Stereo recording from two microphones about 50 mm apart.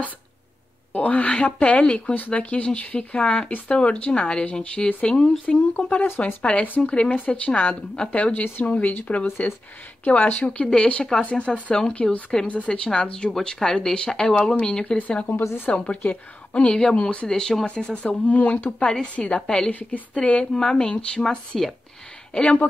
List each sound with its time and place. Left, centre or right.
0.9 s speech: left
2.1 s a woman's voice: left
6.9 s a woman's voice: centre
10.4 s speech: centre
11.2 s speech: left
15.0 s speech: left; by 17.6 s centre
17.6 s speech: left
19.4 s speech: centre
19.7 s a woman's voice: left
20.5 s speech: centre